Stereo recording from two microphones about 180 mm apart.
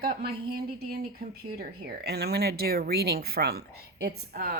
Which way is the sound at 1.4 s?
60° right (ahead or behind).